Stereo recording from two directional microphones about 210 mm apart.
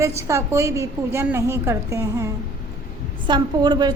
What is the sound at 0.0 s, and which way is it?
A woman's voice, 15° right (ahead or behind).